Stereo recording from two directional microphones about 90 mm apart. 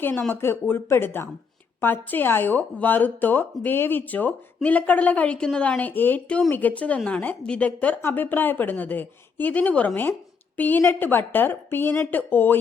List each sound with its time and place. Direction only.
0.0 s a woman's voice: 20° left (ahead or behind)